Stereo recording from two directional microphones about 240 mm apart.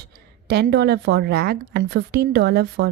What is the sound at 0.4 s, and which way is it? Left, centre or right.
A woman's voice, right.